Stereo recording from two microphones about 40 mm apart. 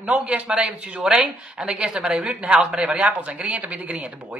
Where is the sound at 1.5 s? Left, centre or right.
Right.